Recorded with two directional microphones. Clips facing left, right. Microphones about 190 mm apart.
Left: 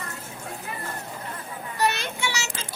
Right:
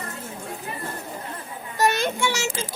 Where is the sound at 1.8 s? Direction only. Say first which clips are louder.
Right 5 dB; 45° right (ahead or behind).